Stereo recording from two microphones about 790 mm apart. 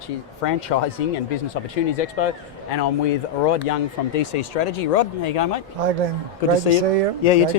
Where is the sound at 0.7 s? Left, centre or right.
Left.